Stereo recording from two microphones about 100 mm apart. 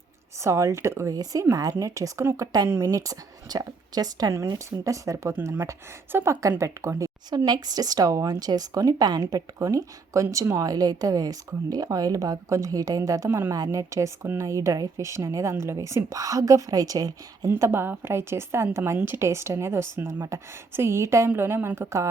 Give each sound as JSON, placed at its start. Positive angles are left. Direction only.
{"t": 0.4, "sound": "speech", "side_deg": -30}
{"t": 2.6, "sound": "a woman's voice", "side_deg": -25}
{"t": 9.6, "sound": "speech", "side_deg": -30}
{"t": 17.5, "sound": "a woman's voice", "side_deg": -25}